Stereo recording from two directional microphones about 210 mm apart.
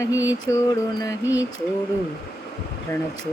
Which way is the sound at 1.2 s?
10° right (ahead or behind).